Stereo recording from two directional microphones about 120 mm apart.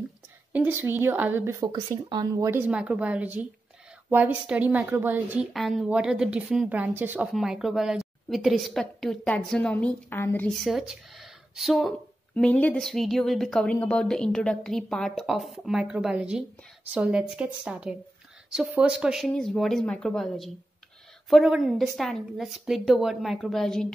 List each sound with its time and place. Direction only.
0.5 s speech: 15° right (ahead or behind)
1.6 s speech: 35° right (ahead or behind)
2.3 s speech: 20° right (ahead or behind)
5.5 s a woman's voice: centre (ahead or behind)
6.7 s speech: 15° right (ahead or behind)
7.3 s a woman's voice: 5° right (ahead or behind); by 10.5 s 15° left (ahead or behind)
10.6 s speech: centre (ahead or behind)
12.4 s a woman's voice: 10° left (ahead or behind)
12.8 s a woman's voice: centre (ahead or behind)